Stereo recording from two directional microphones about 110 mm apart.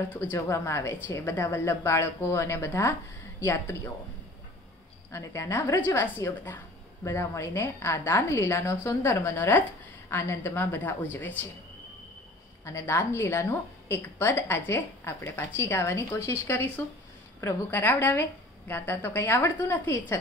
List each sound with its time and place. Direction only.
0.1 s a woman's voice: 20° left (ahead or behind)
5.1 s a woman's voice: 25° left (ahead or behind)
12.6 s a woman's voice: 25° left (ahead or behind)